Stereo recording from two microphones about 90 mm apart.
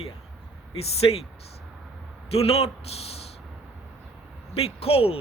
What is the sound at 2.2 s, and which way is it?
Speech, 90° left.